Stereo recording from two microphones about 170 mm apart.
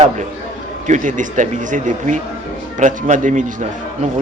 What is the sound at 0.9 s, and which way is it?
Speech, 50° right (ahead or behind).